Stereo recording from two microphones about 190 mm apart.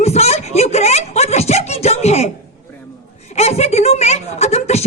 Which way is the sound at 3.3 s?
35° left (ahead or behind).